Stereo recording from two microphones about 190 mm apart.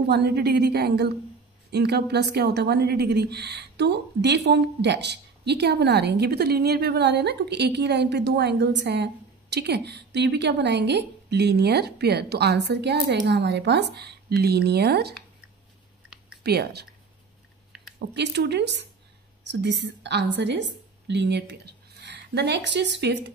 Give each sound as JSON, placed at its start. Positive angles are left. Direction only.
{"t": 0.0, "sound": "a woman's voice", "side_deg": -60}
{"t": 16.4, "sound": "a woman's voice", "side_deg": -60}
{"t": 17.9, "sound": "a woman's voice", "side_deg": -65}